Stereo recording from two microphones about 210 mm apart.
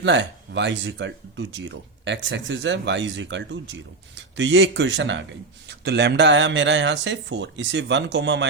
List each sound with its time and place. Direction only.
0.0 s speech: 60° right (ahead or behind)